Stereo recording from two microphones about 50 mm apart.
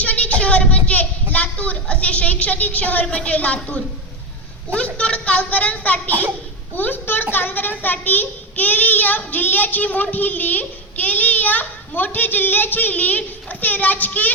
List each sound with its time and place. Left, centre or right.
0.0 s a sound: left
3.1 s a child's voice: centre
3.3 s a child's voice: left